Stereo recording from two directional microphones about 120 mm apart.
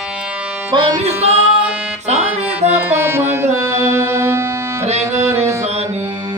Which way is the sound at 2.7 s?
20° right (ahead or behind).